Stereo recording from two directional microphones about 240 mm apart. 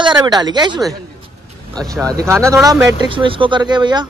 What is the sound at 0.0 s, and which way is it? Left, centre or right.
Speech, centre.